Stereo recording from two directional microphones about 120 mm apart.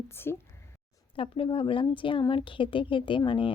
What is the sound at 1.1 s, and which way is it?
A woman's voice, 45° left (ahead or behind).